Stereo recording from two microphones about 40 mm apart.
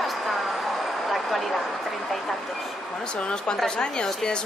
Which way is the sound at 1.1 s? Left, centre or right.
Centre.